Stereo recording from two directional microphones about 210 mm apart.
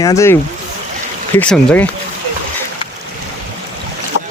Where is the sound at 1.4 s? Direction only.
5° left (ahead or behind).